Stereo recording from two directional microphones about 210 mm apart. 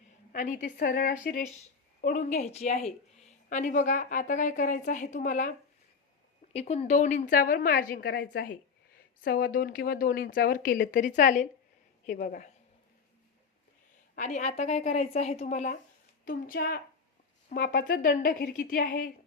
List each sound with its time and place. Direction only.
0.3 s a woman's voice: 40° left (ahead or behind)
14.2 s a woman's voice: 35° left (ahead or behind)